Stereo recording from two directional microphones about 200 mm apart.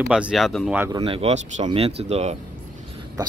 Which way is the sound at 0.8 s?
20° right (ahead or behind).